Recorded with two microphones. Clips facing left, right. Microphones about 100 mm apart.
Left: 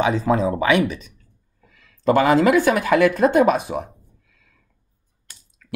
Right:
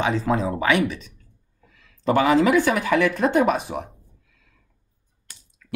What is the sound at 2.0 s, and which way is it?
Speech, 45° left (ahead or behind).